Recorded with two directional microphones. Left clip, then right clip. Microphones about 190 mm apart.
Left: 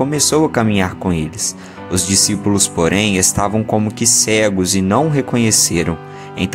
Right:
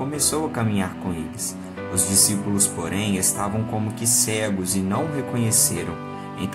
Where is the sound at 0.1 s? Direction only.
45° left (ahead or behind).